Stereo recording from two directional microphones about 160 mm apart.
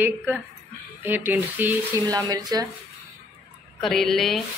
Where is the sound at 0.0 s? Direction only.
10° right (ahead or behind).